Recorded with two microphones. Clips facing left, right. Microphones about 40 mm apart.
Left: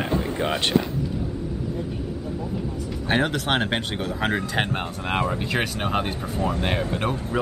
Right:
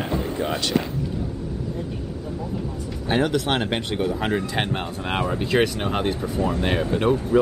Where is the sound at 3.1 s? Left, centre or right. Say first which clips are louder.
Right 1 dB; left.